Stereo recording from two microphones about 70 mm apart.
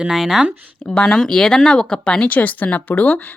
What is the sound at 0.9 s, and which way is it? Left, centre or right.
A woman's voice, centre.